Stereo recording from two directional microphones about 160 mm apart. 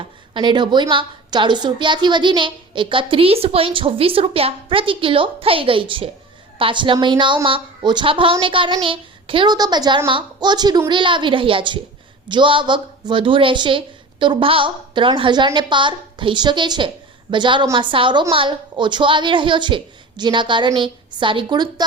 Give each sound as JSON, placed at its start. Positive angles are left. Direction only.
{"t": 0.0, "sound": "a woman's voice", "side_deg": -30}